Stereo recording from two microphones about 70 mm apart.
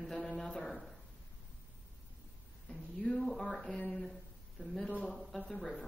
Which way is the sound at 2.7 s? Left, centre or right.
Centre.